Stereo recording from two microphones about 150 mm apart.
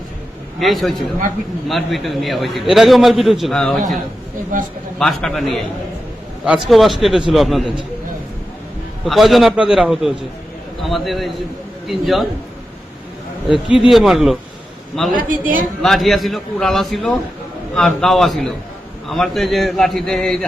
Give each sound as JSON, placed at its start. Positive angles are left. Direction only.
{"t": 0.6, "sound": "a man's voice", "side_deg": 0}
{"t": 4.9, "sound": "a man's voice", "side_deg": 0}
{"t": 9.0, "sound": "a man's voice", "side_deg": 0}
{"t": 13.9, "sound": "a man's voice", "side_deg": 0}
{"t": 15.1, "sound": "a woman's voice", "side_deg": -65}
{"t": 15.6, "sound": "a man's voice", "side_deg": 0}